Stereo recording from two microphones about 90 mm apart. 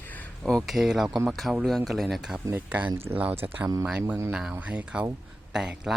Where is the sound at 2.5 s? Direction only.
20° right (ahead or behind).